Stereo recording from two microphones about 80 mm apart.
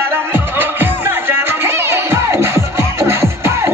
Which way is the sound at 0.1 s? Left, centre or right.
Right.